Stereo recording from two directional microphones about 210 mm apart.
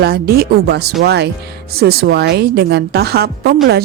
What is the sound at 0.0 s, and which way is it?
A woman's voice, 50° right (ahead or behind).